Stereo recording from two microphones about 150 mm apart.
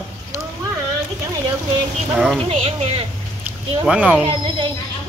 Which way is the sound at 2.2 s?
5° left (ahead or behind).